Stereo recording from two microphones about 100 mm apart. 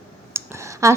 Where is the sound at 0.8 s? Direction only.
30° right (ahead or behind).